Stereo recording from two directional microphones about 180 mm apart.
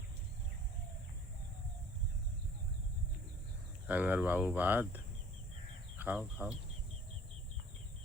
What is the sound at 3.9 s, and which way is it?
Speech, 10° right (ahead or behind).